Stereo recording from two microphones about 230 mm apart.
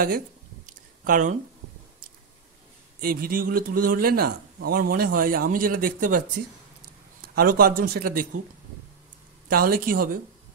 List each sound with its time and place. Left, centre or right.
0.7 s a sound: right
3.0 s a man's voice: right
7.3 s a man's voice: right
9.5 s a man's voice: right